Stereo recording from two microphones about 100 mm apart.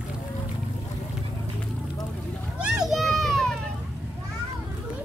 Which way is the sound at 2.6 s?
5° right (ahead or behind).